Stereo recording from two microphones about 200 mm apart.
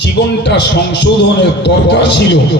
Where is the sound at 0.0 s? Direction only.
60° left (ahead or behind).